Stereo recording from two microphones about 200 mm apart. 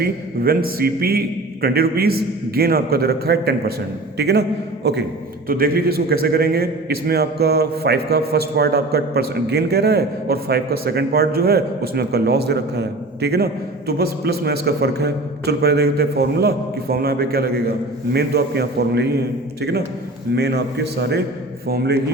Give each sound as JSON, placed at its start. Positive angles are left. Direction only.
{"t": 0.0, "sound": "a man's voice", "side_deg": -50}
{"t": 20.3, "sound": "a man's voice", "side_deg": -55}